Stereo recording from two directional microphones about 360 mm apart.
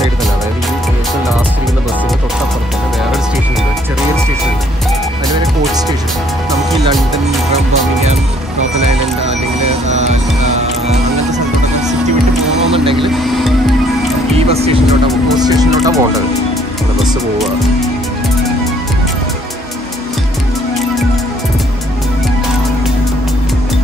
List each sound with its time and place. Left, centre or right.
12.7 s a sound: centre
13.1 s music: centre
14.3 s music: centre